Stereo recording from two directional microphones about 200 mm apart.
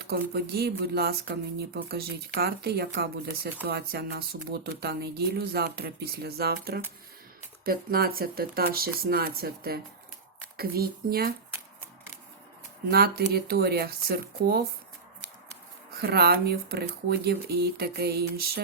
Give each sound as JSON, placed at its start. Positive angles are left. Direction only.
{"t": 0.0, "sound": "speech", "side_deg": -50}
{"t": 12.9, "sound": "speech", "side_deg": -50}
{"t": 16.0, "sound": "speech", "side_deg": -50}